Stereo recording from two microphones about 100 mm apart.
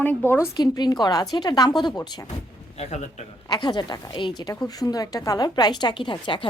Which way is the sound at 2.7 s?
90° left.